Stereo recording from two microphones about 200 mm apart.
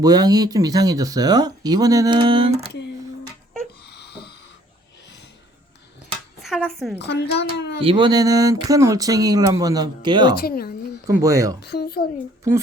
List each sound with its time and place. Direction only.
0.0 s speech: 20° right (ahead or behind)
3.8 s a sound: 55° left (ahead or behind)
6.4 s speech: centre (ahead or behind)
7.0 s a child's voice: 55° left (ahead or behind)
7.8 s speech: 25° right (ahead or behind)
10.4 s a woman's voice: 50° left (ahead or behind)
11.2 s speech: 15° right (ahead or behind)
11.6 s a woman's voice: 55° left (ahead or behind)